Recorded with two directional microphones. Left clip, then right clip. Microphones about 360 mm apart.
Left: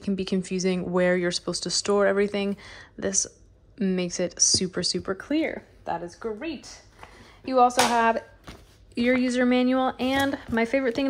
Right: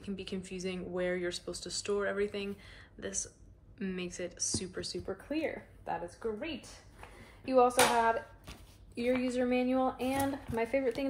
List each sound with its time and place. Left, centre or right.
0.0 s speech: centre
9.2 s speech: left